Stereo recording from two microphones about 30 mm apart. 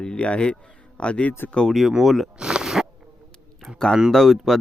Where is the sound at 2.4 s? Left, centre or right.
Right.